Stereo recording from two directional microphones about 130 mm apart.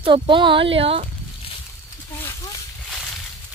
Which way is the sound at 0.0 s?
40° right (ahead or behind).